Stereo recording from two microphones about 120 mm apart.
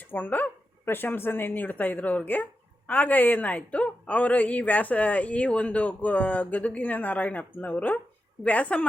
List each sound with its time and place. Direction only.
0.1 s a woman's voice: 15° left (ahead or behind)